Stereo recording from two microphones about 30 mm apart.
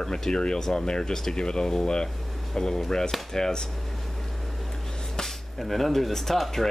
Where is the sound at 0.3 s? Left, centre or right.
Left.